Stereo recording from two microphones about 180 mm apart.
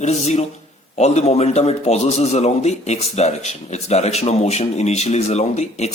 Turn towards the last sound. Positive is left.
turn(degrees=40)  # may be behind; listen again after turning